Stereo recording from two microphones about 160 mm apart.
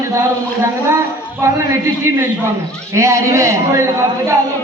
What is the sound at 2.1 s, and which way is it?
A woman's voice, 15° right (ahead or behind).